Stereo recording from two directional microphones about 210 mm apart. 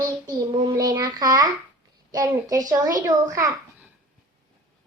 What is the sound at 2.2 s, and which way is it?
A woman's voice, 15° right (ahead or behind).